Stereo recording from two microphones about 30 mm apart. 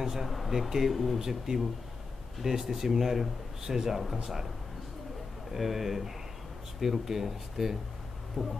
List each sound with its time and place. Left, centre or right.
0.0 s speech: centre
0.9 s speech: centre
1.2 s speech: centre
4.0 s speech: centre
5.5 s speech: centre